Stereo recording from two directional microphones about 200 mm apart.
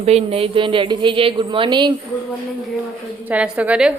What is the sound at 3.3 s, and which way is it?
Speech, 5° right (ahead or behind).